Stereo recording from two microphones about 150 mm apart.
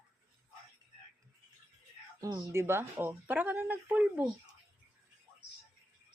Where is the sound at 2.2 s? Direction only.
25° right (ahead or behind).